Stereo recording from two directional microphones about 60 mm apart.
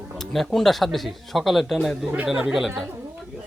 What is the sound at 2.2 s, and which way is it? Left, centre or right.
Speech, centre.